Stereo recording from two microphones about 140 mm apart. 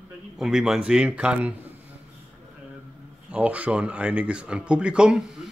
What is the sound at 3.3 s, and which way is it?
Speech, 10° right (ahead or behind).